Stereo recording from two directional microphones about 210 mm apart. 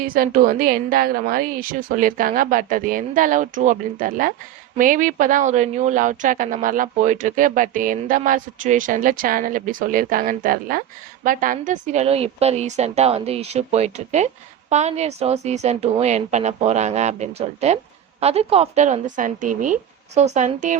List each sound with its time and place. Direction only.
0.0 s speech: 40° right (ahead or behind)